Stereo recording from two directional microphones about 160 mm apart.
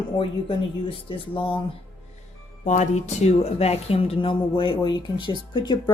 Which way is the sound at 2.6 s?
50° left (ahead or behind).